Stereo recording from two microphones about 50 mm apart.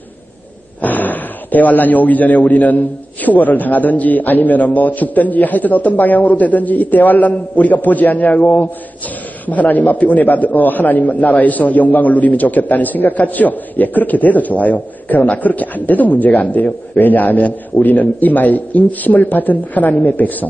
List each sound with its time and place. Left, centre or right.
0.7 s a man's voice: left